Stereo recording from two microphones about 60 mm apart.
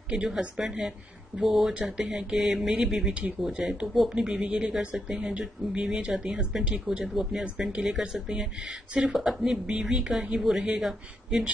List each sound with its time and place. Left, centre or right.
0.1 s speech: centre
1.7 s speech: centre
4.1 s speech: centre
9.1 s speech: centre